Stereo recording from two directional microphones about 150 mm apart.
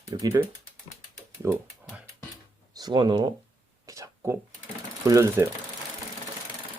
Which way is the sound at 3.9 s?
20° right (ahead or behind).